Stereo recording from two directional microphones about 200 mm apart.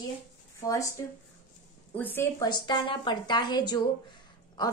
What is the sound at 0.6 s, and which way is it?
Speech, 15° left (ahead or behind).